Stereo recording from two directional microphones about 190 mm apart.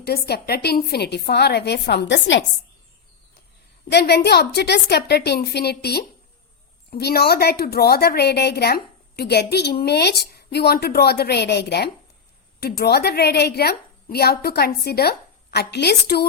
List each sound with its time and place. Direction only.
0.0 s a woman's voice: 55° left (ahead or behind)
3.8 s a woman's voice: 60° left (ahead or behind)